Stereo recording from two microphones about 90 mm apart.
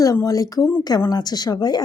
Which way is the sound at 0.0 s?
40° left (ahead or behind).